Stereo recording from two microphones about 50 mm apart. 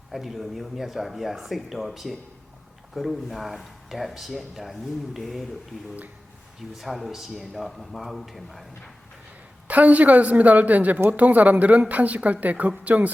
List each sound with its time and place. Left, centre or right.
0.1 s speech: centre
6.7 s speech: centre
9.6 s speech: right